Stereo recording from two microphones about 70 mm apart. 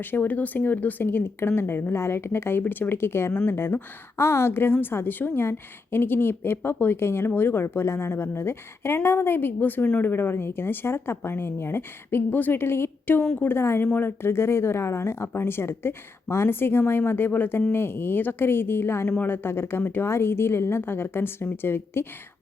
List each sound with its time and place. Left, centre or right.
0.1 s a woman's voice: left